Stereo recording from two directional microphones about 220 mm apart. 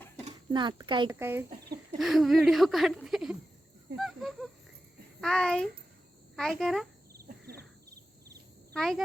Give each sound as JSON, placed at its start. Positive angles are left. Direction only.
{"t": 0.3, "sound": "a child's voice", "side_deg": -20}
{"t": 1.2, "sound": "speech", "side_deg": -10}
{"t": 7.1, "sound": "cricket", "side_deg": -45}
{"t": 8.7, "sound": "speech", "side_deg": 0}